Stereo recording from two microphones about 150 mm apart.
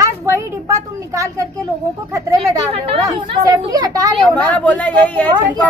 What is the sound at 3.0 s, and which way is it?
A woman's voice, 25° right (ahead or behind).